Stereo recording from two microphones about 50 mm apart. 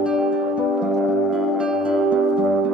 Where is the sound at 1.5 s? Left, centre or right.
Centre.